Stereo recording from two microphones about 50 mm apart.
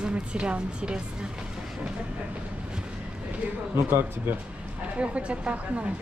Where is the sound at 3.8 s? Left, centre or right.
Right.